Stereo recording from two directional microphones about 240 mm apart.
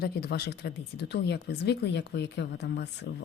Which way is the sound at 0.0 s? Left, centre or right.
Left.